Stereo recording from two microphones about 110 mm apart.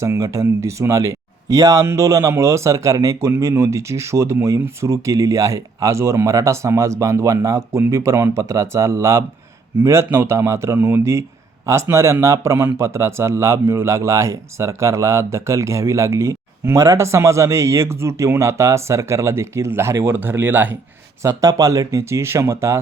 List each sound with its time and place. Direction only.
0.0 s a man's voice: 25° right (ahead or behind)
21.2 s a man's voice: 30° right (ahead or behind)